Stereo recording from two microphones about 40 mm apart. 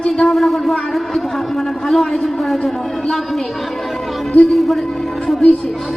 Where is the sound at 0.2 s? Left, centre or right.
Centre.